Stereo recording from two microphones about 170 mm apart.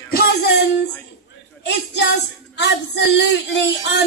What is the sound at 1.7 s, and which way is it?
Speech, 90° left.